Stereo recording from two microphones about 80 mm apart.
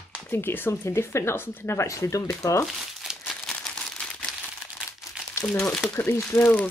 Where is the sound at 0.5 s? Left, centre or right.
Left.